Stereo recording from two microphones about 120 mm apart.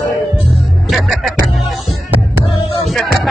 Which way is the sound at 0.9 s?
Centre (ahead or behind).